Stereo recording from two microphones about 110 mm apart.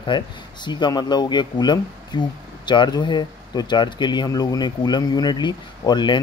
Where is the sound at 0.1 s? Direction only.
45° left (ahead or behind).